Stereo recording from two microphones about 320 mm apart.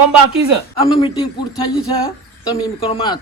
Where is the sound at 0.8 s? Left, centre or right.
Centre.